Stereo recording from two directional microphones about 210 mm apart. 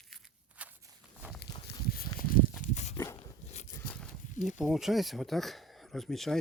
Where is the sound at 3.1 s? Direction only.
30° left (ahead or behind).